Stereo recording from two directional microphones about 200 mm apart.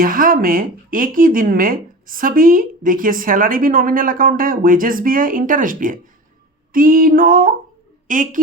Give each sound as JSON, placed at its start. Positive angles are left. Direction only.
{"t": 0.0, "sound": "a woman's voice", "side_deg": -45}